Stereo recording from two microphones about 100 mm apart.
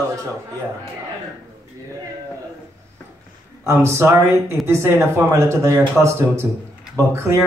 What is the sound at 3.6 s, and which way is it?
Speech, 25° right (ahead or behind).